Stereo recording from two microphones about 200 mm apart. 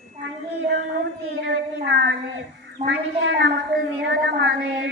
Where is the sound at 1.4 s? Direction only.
60° right (ahead or behind).